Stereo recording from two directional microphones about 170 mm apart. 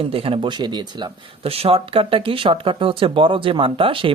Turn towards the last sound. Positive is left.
turn(degrees=-30)  # may be behind; listen again after turning